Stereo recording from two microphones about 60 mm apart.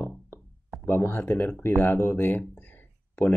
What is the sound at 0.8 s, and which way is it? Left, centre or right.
Speech, left.